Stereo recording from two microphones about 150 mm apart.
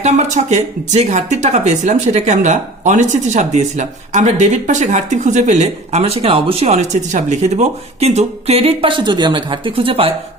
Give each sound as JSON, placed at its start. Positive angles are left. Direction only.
{"t": 0.0, "sound": "speech", "side_deg": -50}